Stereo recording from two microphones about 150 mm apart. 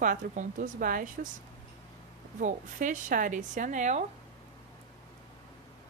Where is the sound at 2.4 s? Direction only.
60° right (ahead or behind).